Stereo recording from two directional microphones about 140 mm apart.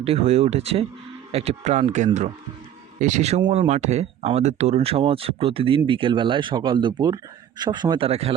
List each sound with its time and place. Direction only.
0.0 s speech: 45° right (ahead or behind)